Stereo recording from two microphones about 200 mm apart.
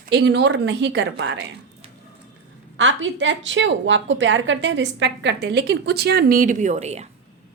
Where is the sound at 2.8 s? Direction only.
70° right (ahead or behind); by 7.0 s 35° right (ahead or behind).